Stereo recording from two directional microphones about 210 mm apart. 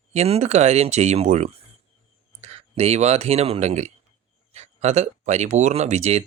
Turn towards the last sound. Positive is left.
turn(degrees=-30)  # may be behind; listen again after turning